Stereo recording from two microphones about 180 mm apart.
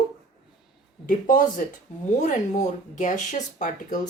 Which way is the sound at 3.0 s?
40° left (ahead or behind).